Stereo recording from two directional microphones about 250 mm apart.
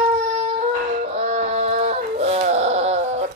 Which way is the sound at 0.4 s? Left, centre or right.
Right.